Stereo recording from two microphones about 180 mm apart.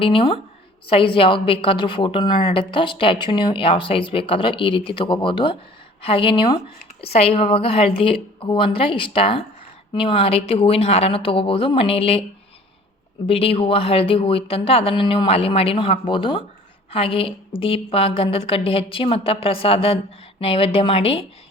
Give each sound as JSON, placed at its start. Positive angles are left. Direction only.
{"t": 0.0, "sound": "a woman's voice", "side_deg": 30}
{"t": 13.2, "sound": "speech", "side_deg": 30}